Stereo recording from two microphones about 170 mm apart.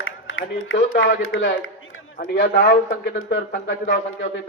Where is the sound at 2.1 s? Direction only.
65° left (ahead or behind).